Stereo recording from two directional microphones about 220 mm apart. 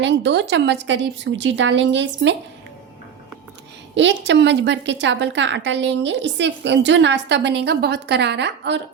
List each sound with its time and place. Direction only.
0.0 s a woman's voice: 55° right (ahead or behind)
3.9 s a woman's voice: 55° right (ahead or behind)